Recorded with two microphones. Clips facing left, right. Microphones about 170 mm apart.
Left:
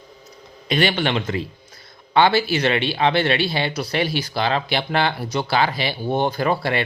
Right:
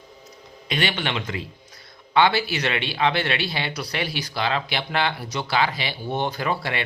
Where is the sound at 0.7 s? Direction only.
35° left (ahead or behind).